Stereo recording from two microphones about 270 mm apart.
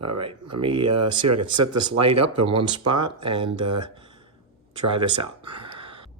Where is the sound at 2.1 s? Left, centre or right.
Right.